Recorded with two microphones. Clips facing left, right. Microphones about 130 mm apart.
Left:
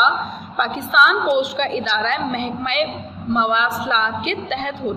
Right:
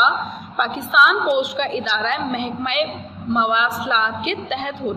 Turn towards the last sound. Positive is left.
turn(degrees=-15)  # may be behind; listen again after turning